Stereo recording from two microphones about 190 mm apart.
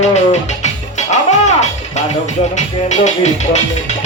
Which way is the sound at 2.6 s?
40° left (ahead or behind).